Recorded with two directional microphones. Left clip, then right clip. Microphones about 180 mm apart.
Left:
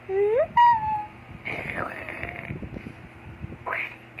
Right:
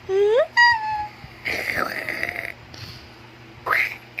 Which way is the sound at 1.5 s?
30° right (ahead or behind).